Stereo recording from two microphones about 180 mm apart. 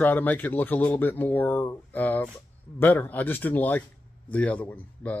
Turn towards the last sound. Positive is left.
turn(degrees=10)  # may be behind; listen again after turning